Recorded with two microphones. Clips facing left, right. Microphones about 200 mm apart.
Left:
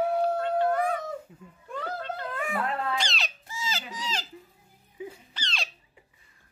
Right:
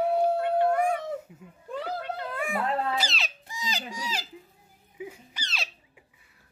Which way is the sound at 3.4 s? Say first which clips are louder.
Right 1 dB; 15° right (ahead or behind).